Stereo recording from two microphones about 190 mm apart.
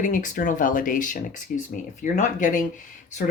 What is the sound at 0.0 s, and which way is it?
Speech, 45° left (ahead or behind).